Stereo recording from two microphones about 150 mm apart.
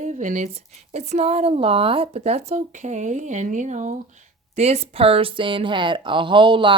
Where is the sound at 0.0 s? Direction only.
55° right (ahead or behind).